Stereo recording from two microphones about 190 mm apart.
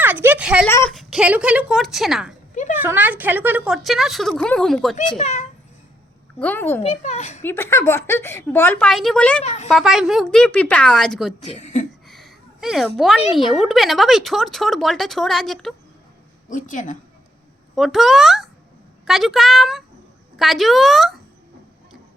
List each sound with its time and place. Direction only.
0.0 s speech: 10° right (ahead or behind)
0.7 s a woman's voice: 15° left (ahead or behind)
0.9 s speech: 5° right (ahead or behind)
5.1 s speech: 35° left (ahead or behind)
6.4 s a woman's voice: 10° left (ahead or behind)
6.8 s speech: 35° left (ahead or behind)
7.4 s a woman's voice: 10° left (ahead or behind)
9.4 s speech: 40° left (ahead or behind)
9.6 s speech: centre (ahead or behind)
11.4 s speech: 35° left (ahead or behind)
12.0 s a sound: centre (ahead or behind)
13.0 s speech: centre (ahead or behind)
16.5 s a woman's voice: 45° left (ahead or behind)
17.7 s speech: centre (ahead or behind)